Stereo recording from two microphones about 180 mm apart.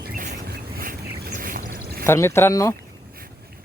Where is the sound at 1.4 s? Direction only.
50° right (ahead or behind).